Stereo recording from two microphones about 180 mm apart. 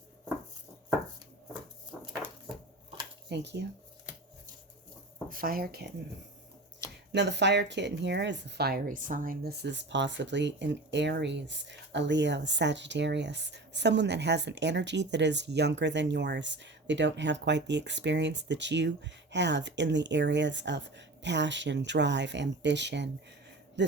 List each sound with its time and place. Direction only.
3.2 s speech: 70° right (ahead or behind)
5.3 s speech: 55° right (ahead or behind)
7.1 s speech: 70° right (ahead or behind)